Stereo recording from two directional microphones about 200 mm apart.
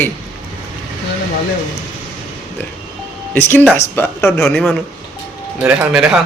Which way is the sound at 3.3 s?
10° left (ahead or behind).